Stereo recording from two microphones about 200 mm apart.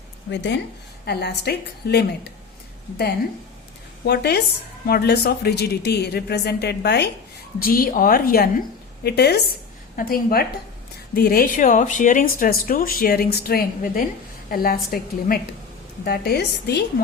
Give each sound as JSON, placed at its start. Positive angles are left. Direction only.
{"t": 0.3, "sound": "a woman's voice", "side_deg": 60}
{"t": 4.0, "sound": "a woman's voice", "side_deg": 55}
{"t": 7.6, "sound": "speech", "side_deg": 45}